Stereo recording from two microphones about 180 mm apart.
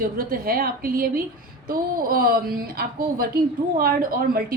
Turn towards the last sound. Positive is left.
turn(degrees=-50)  # may be behind; listen again after turning